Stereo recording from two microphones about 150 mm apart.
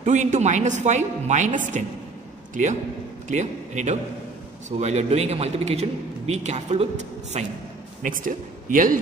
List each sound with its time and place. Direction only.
0.0 s a man's voice: 50° right (ahead or behind)
8.0 s a man's voice: 60° right (ahead or behind)